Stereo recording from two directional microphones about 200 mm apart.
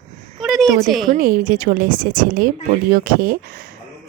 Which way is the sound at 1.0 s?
45° right (ahead or behind).